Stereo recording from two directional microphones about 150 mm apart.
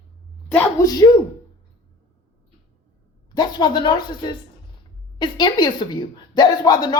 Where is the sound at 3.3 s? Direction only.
30° left (ahead or behind).